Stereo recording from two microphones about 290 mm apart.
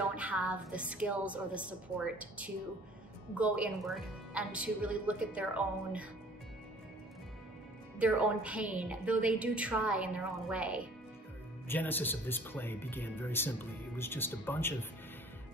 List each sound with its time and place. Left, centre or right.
0.0 s a woman's voice: centre
8.0 s a woman's voice: centre
11.6 s speech: centre